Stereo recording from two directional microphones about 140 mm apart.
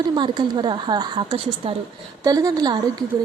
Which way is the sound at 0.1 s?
30° right (ahead or behind).